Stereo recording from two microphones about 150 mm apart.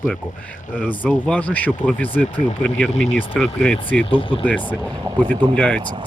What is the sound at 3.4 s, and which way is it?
Speech, 5° left (ahead or behind).